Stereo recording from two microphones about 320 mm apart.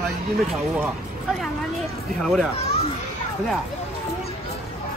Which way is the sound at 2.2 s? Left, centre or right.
Centre.